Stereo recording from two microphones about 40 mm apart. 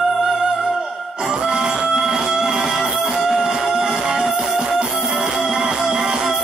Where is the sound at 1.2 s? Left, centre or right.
Centre.